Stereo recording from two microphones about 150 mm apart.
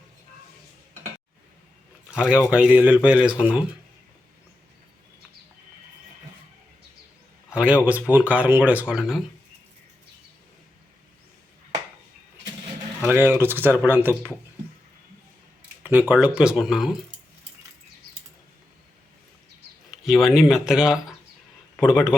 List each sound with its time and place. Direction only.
2.3 s speech: 5° right (ahead or behind)
7.5 s speech: 10° right (ahead or behind)
13.0 s speech: 15° right (ahead or behind)
15.8 s speech: 10° right (ahead or behind)
19.9 s speech: centre (ahead or behind)
21.8 s a man's voice: 15° left (ahead or behind)